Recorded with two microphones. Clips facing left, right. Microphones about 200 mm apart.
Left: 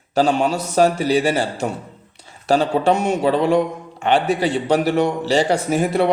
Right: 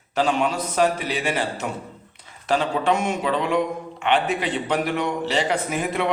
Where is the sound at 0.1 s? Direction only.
35° left (ahead or behind).